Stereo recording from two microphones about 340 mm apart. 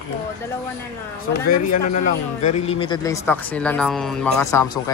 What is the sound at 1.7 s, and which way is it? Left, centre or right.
A man's voice, left.